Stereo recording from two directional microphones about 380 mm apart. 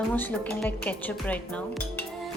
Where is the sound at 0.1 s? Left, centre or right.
Centre.